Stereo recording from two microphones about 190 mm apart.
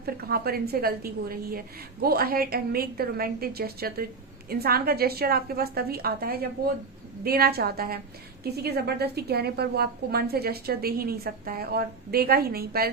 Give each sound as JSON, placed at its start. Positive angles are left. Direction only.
{"t": 0.0, "sound": "a woman's voice", "side_deg": -55}